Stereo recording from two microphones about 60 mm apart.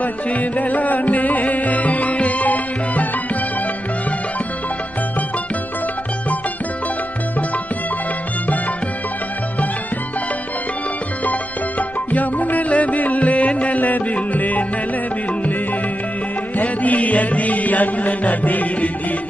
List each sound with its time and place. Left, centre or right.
0.0 s music: left
12.1 s music: left
16.5 s music: left